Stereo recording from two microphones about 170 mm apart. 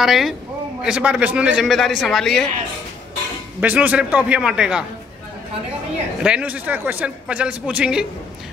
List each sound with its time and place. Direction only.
0.0 s a man's voice: centre (ahead or behind)
3.6 s a man's voice: 10° right (ahead or behind)
6.2 s a man's voice: 5° right (ahead or behind)